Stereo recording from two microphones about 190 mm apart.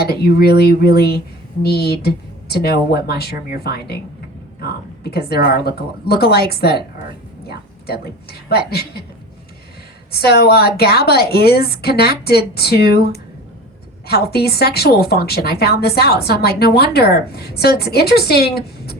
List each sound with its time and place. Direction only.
0.0 s a woman's voice: 55° left (ahead or behind)
8.0 s a woman's voice: 55° left (ahead or behind)
10.1 s a woman's voice: 55° left (ahead or behind)